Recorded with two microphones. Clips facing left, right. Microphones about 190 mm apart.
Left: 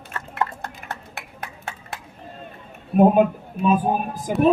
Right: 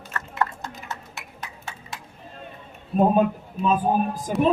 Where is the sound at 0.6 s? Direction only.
60° left (ahead or behind).